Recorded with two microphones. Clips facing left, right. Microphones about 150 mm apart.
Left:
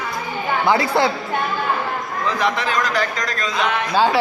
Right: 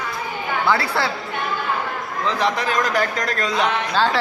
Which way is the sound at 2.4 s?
40° right (ahead or behind).